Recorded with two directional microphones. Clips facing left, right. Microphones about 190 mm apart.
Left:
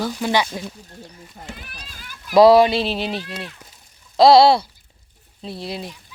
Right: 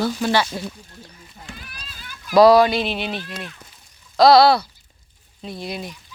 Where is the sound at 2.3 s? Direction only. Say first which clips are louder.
Left 1 dB; 25° left (ahead or behind).